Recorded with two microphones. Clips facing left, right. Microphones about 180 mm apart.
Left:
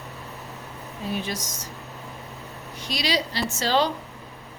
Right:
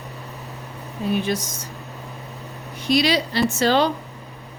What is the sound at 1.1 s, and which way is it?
Speech, 60° right (ahead or behind).